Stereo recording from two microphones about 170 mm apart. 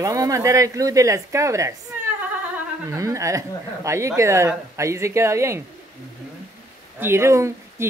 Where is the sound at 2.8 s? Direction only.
20° right (ahead or behind).